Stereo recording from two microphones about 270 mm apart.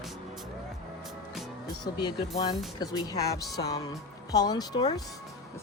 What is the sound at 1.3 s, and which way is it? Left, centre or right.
Music, centre.